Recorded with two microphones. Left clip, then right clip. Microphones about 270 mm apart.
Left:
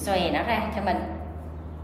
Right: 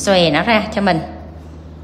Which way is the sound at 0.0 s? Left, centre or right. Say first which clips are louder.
Right 11 dB; right.